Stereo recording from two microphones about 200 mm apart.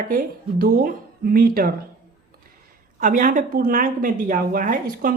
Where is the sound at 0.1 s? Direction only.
45° right (ahead or behind).